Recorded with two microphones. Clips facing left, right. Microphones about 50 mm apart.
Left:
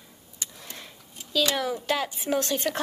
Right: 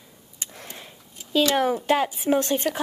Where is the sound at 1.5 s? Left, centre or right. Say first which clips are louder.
Right 6 dB; right.